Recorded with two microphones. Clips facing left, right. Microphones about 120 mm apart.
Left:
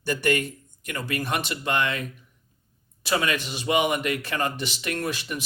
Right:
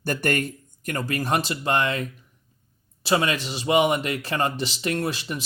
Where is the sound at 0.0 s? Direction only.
50° right (ahead or behind).